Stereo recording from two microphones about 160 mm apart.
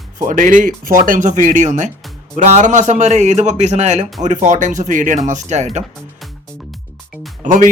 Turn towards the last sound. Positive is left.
turn(degrees=-50)  # may be behind; listen again after turning